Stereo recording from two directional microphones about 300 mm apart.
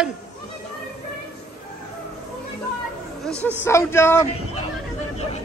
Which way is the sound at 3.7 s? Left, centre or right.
Centre.